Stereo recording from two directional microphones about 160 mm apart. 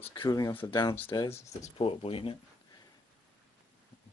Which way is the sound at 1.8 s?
35° left (ahead or behind).